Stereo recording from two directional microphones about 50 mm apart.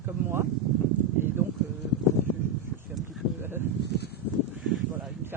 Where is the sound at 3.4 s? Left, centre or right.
Right.